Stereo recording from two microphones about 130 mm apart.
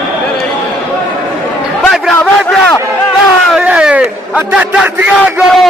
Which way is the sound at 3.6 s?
10° right (ahead or behind).